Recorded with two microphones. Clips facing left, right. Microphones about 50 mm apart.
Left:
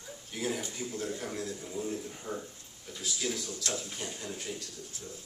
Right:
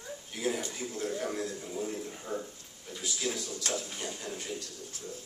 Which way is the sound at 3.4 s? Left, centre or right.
Right.